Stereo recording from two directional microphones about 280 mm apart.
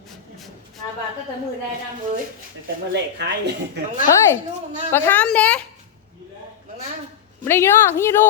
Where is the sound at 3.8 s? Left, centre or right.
Right.